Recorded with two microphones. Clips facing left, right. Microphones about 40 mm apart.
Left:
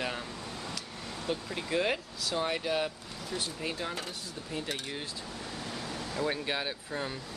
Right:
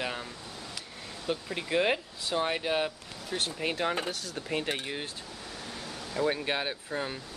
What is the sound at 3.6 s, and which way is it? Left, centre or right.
Speech, right.